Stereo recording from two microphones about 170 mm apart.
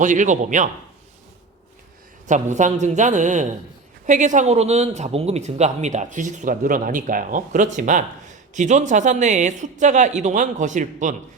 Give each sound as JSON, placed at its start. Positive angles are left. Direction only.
{"t": 0.0, "sound": "speech", "side_deg": -45}
{"t": 2.2, "sound": "speech", "side_deg": -45}